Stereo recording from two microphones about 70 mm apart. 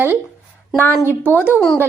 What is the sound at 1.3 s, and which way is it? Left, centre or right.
Speech, centre.